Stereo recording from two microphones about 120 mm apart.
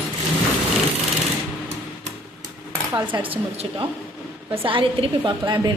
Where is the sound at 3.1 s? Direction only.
35° right (ahead or behind).